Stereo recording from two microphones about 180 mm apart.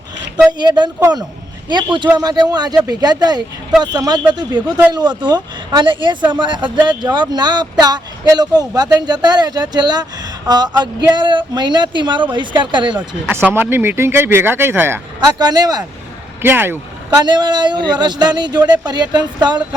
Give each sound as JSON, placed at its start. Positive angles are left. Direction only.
{"t": 0.6, "sound": "speech", "side_deg": -25}
{"t": 13.0, "sound": "speech", "side_deg": -10}
{"t": 17.2, "sound": "speech", "side_deg": -25}